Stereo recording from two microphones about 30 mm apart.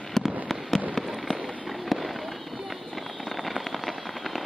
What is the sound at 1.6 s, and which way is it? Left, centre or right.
Run, centre.